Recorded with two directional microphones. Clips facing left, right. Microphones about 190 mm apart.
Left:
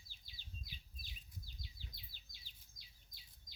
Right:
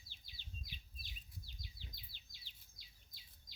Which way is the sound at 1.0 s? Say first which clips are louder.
Left 1 dB; 40° left (ahead or behind).